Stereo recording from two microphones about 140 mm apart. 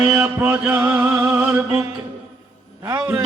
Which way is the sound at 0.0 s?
10° right (ahead or behind).